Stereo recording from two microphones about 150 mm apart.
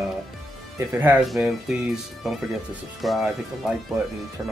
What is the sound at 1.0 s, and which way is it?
Speech, 10° right (ahead or behind).